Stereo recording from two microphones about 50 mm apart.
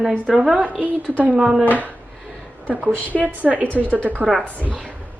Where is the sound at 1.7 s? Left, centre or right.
Right.